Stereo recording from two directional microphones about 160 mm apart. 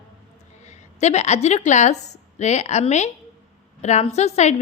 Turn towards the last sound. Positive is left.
turn(degrees=45)  # may be behind; listen again after turning